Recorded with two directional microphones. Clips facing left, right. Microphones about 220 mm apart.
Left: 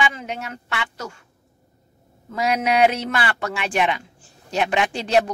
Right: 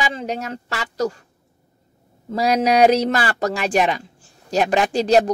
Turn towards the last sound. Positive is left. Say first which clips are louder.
# right 4 dB
turn(degrees=-40)  # may be behind; listen again after turning